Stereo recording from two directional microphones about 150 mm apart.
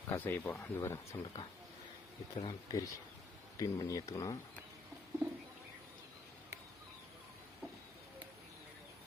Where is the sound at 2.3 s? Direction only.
25° left (ahead or behind).